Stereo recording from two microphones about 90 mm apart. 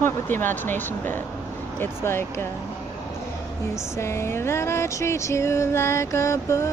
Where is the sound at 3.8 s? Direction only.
30° left (ahead or behind).